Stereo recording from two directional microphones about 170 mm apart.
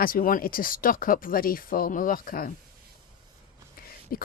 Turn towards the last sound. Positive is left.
turn(degrees=60)  # may be behind; listen again after turning